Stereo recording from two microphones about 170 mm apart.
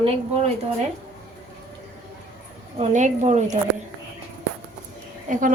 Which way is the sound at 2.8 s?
45° right (ahead or behind).